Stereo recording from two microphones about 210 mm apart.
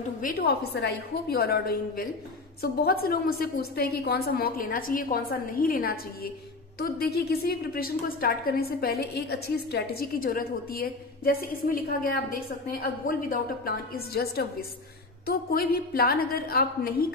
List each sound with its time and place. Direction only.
0.2 s a woman's voice: 45° left (ahead or behind)